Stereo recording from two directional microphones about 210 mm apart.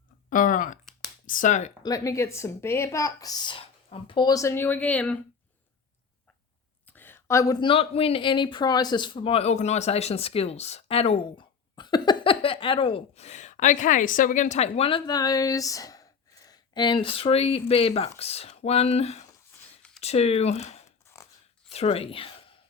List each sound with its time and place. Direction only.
0.3 s speech: 40° left (ahead or behind)
1.8 s speech: 15° left (ahead or behind)
6.9 s speech: 10° left (ahead or behind); by 22.4 s 25° left (ahead or behind)